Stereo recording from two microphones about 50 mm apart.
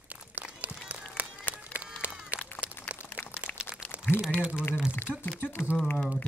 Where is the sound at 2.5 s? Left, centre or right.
Left.